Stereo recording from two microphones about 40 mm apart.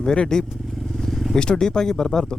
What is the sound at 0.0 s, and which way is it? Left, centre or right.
Speech, centre.